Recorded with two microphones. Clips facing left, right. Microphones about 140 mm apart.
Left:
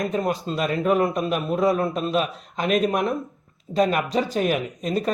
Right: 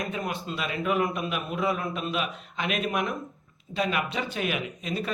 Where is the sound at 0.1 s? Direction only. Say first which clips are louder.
Left 8 dB; 40° left (ahead or behind).